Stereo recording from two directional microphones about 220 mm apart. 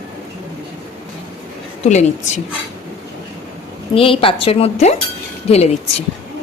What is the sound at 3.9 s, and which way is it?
A woman's voice, 25° left (ahead or behind).